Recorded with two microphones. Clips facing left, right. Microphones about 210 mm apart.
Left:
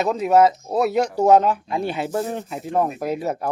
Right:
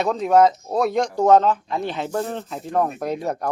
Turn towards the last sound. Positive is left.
turn(degrees=5)  # may be behind; listen again after turning